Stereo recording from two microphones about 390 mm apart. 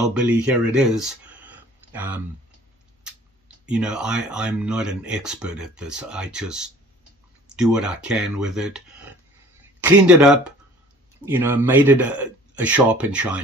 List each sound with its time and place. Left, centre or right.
0.0 s speech: centre